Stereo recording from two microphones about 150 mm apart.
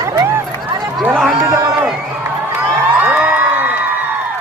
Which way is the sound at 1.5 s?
15° right (ahead or behind).